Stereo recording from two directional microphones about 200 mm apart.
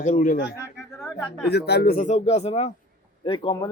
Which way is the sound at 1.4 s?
55° left (ahead or behind).